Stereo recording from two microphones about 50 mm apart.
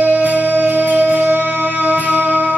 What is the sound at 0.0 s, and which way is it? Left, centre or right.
Music, right.